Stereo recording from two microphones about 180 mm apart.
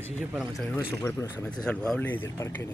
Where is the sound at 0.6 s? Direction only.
10° left (ahead or behind).